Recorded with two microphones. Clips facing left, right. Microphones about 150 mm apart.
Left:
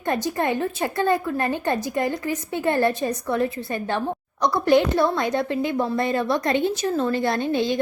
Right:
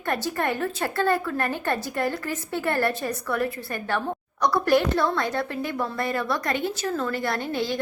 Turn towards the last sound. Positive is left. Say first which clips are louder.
# left 5 dB
turn(degrees=20)  # may be behind; listen again after turning